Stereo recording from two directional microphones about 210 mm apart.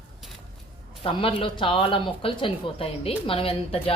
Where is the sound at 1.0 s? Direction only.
25° left (ahead or behind).